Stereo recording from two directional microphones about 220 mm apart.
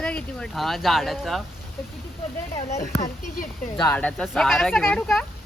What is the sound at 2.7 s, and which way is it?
Speech, 35° left (ahead or behind).